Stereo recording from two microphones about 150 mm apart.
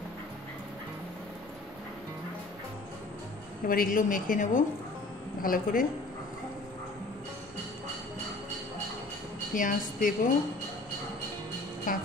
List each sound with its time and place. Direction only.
3.6 s a woman's voice: 70° left (ahead or behind)
9.5 s a woman's voice: 65° left (ahead or behind)
11.9 s a woman's voice: 65° left (ahead or behind)